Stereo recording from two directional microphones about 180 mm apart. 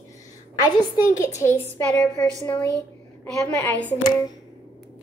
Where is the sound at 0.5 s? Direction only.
20° left (ahead or behind).